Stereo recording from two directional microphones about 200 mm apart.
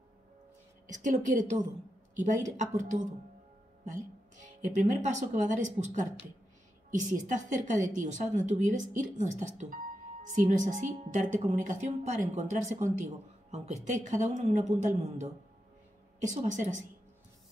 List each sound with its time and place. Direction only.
0.9 s a woman's voice: 40° right (ahead or behind)